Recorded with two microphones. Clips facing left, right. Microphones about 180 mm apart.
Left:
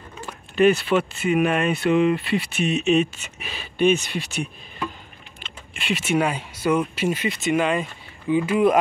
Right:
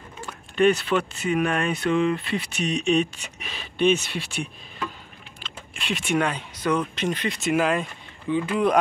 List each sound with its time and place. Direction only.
0.6 s speech: 5° left (ahead or behind)